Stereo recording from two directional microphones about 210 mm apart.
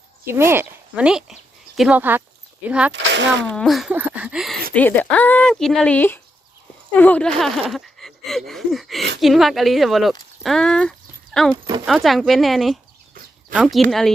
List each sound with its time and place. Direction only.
0.3 s speech: 10° right (ahead or behind)
2.9 s speech: 60° right (ahead or behind)
3.4 s speech: 5° left (ahead or behind)